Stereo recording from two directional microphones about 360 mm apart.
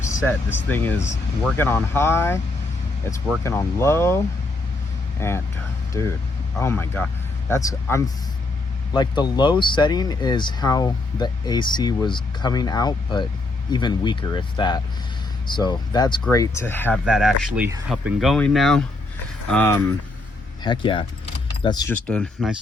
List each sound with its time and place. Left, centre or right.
0.1 s speech: centre
3.4 s speech: centre
5.2 s speech: centre